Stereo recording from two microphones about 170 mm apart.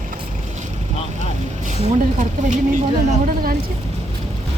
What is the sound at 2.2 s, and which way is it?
Speech, 45° right (ahead or behind).